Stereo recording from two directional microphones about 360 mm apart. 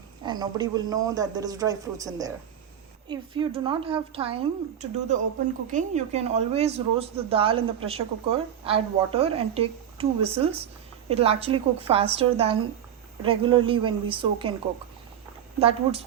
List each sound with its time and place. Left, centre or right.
0.2 s a woman's voice: centre
15.5 s a woman's voice: centre